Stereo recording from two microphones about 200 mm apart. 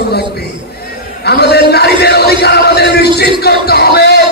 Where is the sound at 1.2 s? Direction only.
55° left (ahead or behind).